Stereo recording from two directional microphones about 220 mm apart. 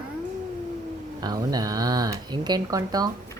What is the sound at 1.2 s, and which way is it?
Speech, 15° right (ahead or behind).